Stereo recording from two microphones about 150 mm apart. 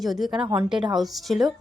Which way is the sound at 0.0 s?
Centre (ahead or behind).